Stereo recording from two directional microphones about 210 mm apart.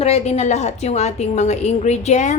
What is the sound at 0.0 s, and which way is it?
A woman's voice, 30° left (ahead or behind).